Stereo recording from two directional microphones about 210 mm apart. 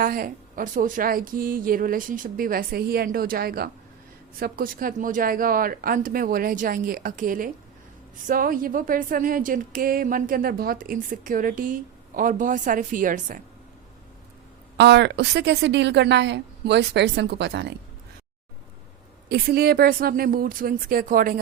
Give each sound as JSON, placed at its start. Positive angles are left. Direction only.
{"t": 0.0, "sound": "speech", "side_deg": -40}
{"t": 14.8, "sound": "a woman's voice", "side_deg": -55}
{"t": 19.3, "sound": "speech", "side_deg": -50}